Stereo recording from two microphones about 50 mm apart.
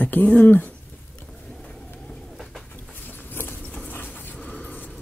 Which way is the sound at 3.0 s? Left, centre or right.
Left.